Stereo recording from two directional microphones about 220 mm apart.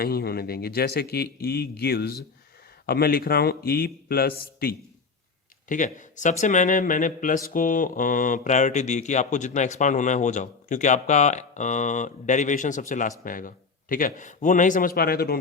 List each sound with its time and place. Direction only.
0.0 s speech: 45° left (ahead or behind)
6.4 s mantra: 35° left (ahead or behind)